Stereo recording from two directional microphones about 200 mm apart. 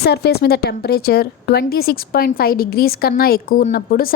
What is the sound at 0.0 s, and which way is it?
A woman's voice, 55° left (ahead or behind).